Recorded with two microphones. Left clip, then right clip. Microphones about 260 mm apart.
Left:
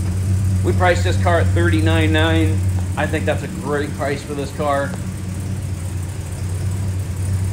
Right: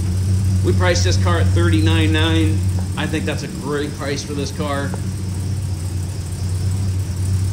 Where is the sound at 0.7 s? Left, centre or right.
Centre.